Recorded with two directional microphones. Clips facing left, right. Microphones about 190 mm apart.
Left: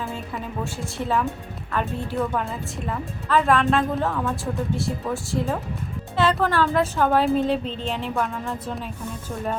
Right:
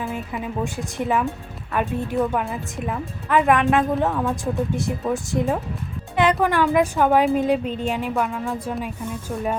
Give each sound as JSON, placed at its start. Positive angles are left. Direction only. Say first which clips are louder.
{"t": 0.6, "sound": "a woman's voice", "louder": "right 3 dB", "side_deg": -15}